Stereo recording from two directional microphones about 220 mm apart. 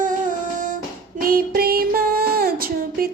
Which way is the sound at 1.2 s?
40° right (ahead or behind).